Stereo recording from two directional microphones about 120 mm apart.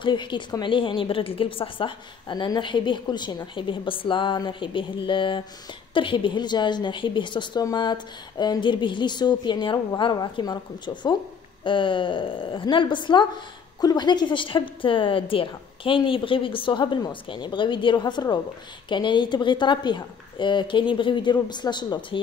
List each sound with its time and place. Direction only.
0.0 s a woman's voice: 40° left (ahead or behind)